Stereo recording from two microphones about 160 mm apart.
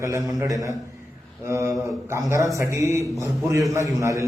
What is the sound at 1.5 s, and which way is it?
Mantra, 15° right (ahead or behind).